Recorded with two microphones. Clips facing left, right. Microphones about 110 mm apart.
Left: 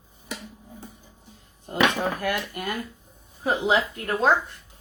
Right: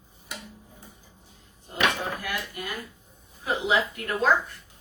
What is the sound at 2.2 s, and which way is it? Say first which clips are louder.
Dishes: left 6 dB; 55° left (ahead or behind).